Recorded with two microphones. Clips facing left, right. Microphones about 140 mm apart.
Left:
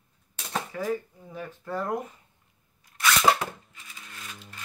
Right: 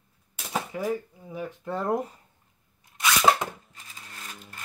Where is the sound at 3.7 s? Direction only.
40° right (ahead or behind).